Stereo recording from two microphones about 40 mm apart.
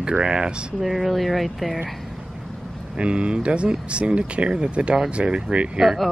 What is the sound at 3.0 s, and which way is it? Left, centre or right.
Speech, right.